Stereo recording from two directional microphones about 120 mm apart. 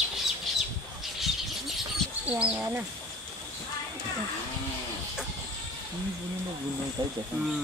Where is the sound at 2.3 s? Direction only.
15° right (ahead or behind).